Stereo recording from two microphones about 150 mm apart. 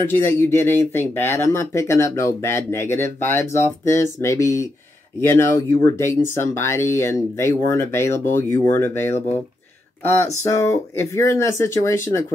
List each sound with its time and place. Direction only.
0.1 s speech: 15° left (ahead or behind)
10.4 s speech: 20° left (ahead or behind)